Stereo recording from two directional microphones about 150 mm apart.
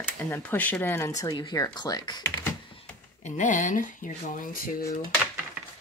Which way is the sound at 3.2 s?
55° left (ahead or behind).